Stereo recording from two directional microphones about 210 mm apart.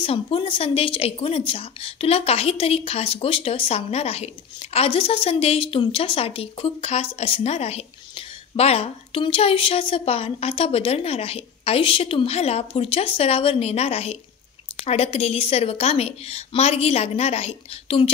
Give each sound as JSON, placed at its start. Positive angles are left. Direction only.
{"t": 0.0, "sound": "a woman's voice", "side_deg": 25}